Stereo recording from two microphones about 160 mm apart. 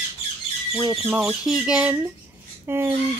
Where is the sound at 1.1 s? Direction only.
5° right (ahead or behind).